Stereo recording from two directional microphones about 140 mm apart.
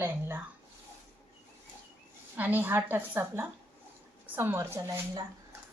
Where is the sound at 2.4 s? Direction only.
10° right (ahead or behind).